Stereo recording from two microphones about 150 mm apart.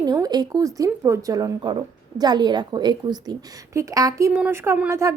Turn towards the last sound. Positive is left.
turn(degrees=-20)  # may be behind; listen again after turning